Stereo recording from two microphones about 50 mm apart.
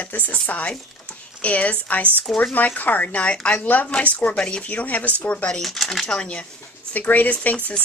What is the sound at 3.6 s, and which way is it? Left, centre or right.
Speech, left.